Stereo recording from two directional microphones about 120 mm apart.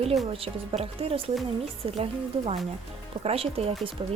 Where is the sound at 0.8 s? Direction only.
55° right (ahead or behind).